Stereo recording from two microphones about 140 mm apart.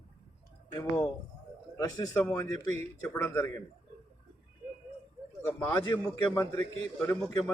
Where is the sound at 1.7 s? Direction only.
25° left (ahead or behind).